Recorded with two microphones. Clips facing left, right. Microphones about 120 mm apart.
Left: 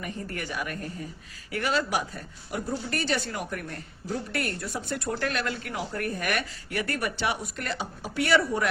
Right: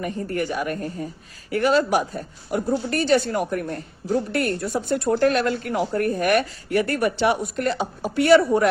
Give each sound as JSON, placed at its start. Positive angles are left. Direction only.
{"t": 0.0, "sound": "speech", "side_deg": -35}